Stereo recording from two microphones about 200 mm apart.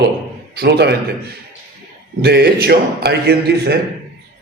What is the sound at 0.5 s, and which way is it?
Speech, 55° right (ahead or behind).